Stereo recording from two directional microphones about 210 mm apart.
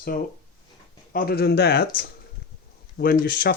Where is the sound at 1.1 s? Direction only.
45° left (ahead or behind).